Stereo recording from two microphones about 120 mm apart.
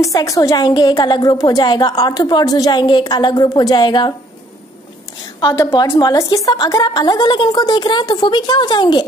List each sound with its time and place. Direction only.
0.0 s a woman's voice: 30° left (ahead or behind)
5.4 s a woman's voice: 30° left (ahead or behind)